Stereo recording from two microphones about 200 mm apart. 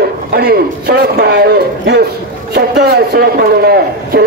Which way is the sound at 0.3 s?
50° right (ahead or behind).